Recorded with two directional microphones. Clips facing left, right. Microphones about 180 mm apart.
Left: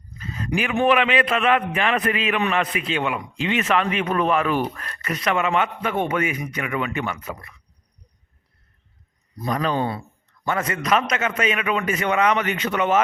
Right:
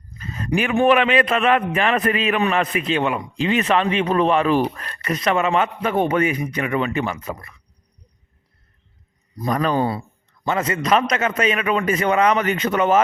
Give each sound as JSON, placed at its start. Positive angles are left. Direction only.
{"t": 0.2, "sound": "a man's voice", "side_deg": -45}
{"t": 9.4, "sound": "a man's voice", "side_deg": -45}
{"t": 10.4, "sound": "a man's voice", "side_deg": -25}